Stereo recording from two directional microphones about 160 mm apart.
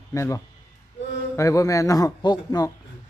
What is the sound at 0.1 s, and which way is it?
A man's voice, 20° left (ahead or behind).